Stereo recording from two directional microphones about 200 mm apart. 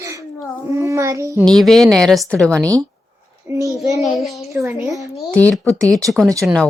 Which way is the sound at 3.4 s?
15° right (ahead or behind).